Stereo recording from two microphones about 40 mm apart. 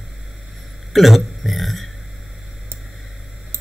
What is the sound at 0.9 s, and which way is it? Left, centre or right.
Burping, centre.